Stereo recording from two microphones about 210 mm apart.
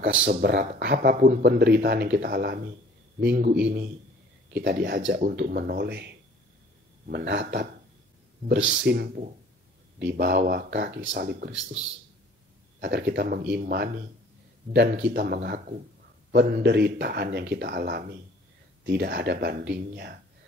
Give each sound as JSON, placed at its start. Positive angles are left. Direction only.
{"t": 0.2, "sound": "speech", "side_deg": -50}
{"t": 4.6, "sound": "speech", "side_deg": -50}
{"t": 7.1, "sound": "speech", "side_deg": -55}
{"t": 12.8, "sound": "speech", "side_deg": -55}